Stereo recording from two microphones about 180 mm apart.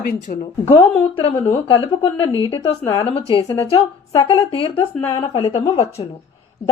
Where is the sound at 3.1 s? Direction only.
30° left (ahead or behind).